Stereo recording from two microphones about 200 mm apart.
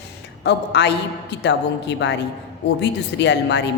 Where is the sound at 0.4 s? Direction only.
60° left (ahead or behind).